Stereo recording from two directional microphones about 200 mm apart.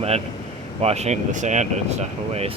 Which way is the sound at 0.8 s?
30° right (ahead or behind).